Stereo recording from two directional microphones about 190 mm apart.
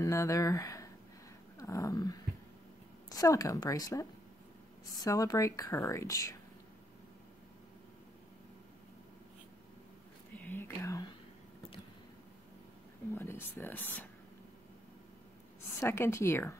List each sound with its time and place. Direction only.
0.0 s speech: 15° left (ahead or behind)
10.4 s whispering: 10° left (ahead or behind)
13.1 s speech: 10° left (ahead or behind)
15.8 s speech: 15° left (ahead or behind)